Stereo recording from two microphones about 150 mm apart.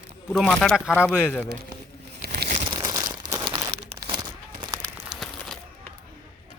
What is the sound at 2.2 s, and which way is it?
Crumpling, 90° right.